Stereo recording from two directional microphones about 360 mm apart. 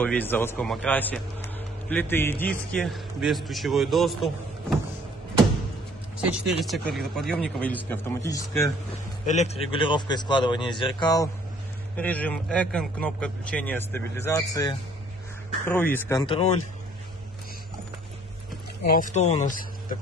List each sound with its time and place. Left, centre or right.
0.0 s a man's voice: centre
6.6 s a man's voice: centre
9.2 s a man's voice: centre
18.9 s speech: left